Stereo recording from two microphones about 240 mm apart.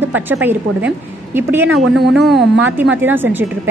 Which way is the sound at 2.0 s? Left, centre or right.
Right.